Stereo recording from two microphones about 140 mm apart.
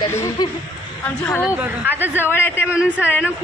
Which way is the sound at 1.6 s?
15° right (ahead or behind).